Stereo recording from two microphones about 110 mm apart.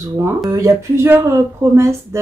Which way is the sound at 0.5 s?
30° right (ahead or behind).